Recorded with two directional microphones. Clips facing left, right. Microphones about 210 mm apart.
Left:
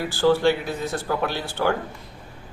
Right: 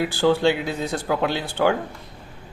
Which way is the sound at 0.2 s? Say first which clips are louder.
Left 1 dB; 20° right (ahead or behind).